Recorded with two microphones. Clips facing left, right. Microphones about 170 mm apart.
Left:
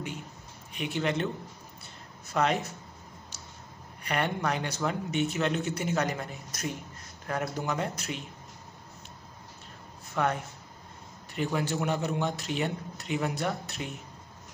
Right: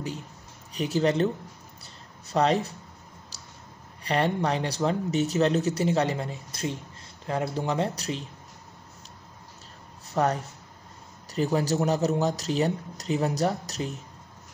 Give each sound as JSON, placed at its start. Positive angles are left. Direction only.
{"t": 0.7, "sound": "speech", "side_deg": -40}
{"t": 2.3, "sound": "speech", "side_deg": -35}
{"t": 4.0, "sound": "speech", "side_deg": -30}
{"t": 10.1, "sound": "speech", "side_deg": -35}